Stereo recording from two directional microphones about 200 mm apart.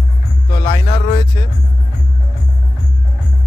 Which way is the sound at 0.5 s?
15° left (ahead or behind).